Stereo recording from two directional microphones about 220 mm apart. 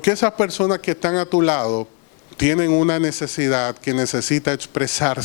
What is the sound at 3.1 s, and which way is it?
Speech, 10° left (ahead or behind).